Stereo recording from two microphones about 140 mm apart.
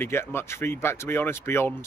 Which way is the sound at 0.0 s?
15° left (ahead or behind).